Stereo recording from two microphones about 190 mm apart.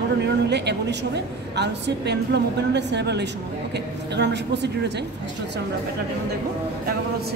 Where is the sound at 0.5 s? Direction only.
65° right (ahead or behind).